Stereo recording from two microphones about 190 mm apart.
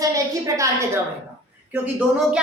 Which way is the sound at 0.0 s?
15° right (ahead or behind).